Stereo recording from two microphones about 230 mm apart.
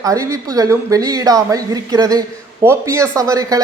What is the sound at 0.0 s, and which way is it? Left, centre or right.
Speech, centre.